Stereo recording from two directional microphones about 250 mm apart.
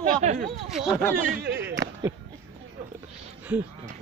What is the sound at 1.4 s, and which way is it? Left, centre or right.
Speech, right.